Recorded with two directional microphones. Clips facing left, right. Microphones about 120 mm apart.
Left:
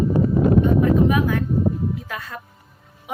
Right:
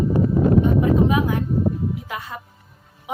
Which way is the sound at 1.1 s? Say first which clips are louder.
Left 1 dB; 20° right (ahead or behind).